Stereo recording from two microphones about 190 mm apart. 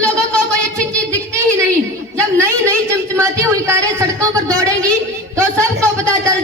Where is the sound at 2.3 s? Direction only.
15° right (ahead or behind).